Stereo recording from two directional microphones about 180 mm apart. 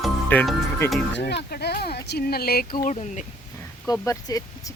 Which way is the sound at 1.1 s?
70° left (ahead or behind).